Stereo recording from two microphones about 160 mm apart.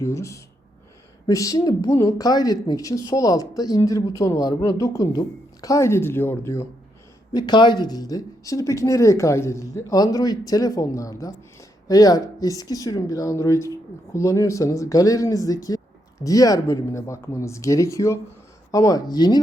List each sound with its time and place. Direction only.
0.0 s speech: 20° left (ahead or behind)
7.3 s speech: 30° left (ahead or behind)